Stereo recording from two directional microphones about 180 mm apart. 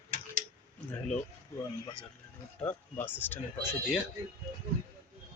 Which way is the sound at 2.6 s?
10° left (ahead or behind).